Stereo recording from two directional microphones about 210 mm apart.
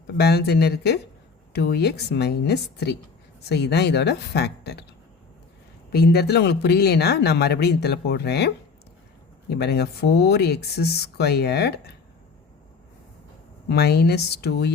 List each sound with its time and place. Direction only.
0.1 s speech: 50° left (ahead or behind)
5.9 s speech: 50° left (ahead or behind)
13.7 s speech: 50° left (ahead or behind)